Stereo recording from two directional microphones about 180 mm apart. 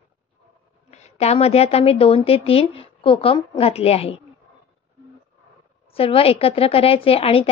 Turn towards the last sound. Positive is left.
turn(degrees=30)  # may be behind; listen again after turning